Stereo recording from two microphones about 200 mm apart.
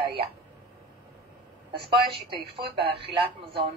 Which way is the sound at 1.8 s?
25° right (ahead or behind).